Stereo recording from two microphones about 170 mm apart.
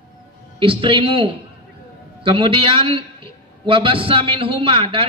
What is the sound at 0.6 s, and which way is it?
A man's voice, 30° right (ahead or behind).